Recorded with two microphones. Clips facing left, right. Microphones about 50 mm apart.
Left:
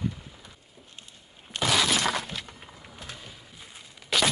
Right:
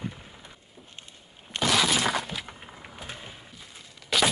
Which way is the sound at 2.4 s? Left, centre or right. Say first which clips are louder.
Right 3 dB; right.